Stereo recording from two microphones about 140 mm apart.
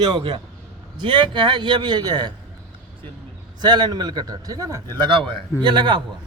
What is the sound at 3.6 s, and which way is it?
A man's voice, 30° right (ahead or behind).